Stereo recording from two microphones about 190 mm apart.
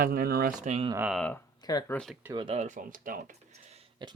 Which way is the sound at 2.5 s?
40° right (ahead or behind).